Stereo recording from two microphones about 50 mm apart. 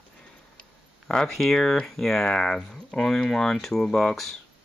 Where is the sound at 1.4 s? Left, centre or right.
Centre.